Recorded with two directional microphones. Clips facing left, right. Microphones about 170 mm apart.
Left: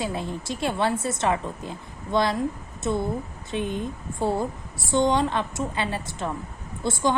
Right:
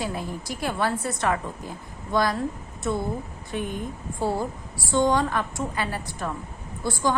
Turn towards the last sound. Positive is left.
turn(degrees=20)  # may be behind; listen again after turning